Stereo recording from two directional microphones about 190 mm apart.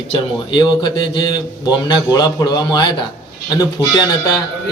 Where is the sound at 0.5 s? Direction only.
25° left (ahead or behind).